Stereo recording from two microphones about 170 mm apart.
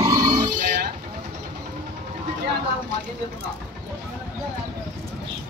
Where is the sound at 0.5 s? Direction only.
60° right (ahead or behind).